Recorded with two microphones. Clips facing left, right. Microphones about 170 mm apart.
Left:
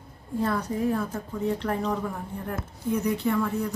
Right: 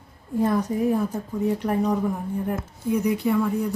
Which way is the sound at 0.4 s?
15° right (ahead or behind).